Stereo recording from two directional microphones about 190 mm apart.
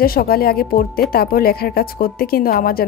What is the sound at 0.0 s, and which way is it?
A woman's voice, 50° left (ahead or behind).